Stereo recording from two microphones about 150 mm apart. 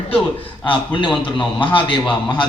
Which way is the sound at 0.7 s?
30° left (ahead or behind).